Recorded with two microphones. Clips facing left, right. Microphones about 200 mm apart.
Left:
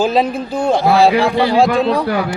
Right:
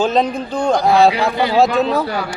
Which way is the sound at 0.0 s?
5° left (ahead or behind).